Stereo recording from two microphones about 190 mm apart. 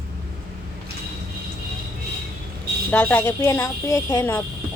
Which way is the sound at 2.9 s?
10° left (ahead or behind).